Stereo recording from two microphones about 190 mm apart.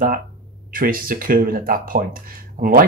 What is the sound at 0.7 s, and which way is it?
Speech, 50° right (ahead or behind).